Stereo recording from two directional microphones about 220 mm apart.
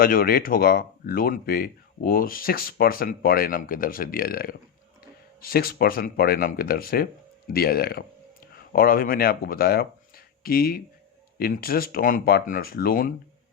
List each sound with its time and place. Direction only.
0.0 s speech: 40° left (ahead or behind)